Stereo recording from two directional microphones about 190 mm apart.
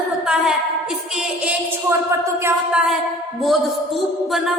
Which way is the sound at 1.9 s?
15° right (ahead or behind).